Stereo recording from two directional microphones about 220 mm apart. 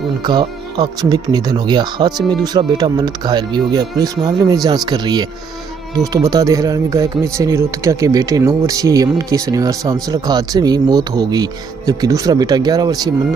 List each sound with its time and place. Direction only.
0.3 s speech: 20° right (ahead or behind)